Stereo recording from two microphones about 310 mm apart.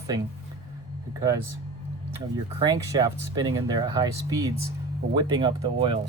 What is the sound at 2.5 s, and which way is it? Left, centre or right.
Speech, centre.